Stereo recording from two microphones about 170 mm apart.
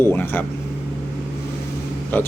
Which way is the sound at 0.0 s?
10° left (ahead or behind).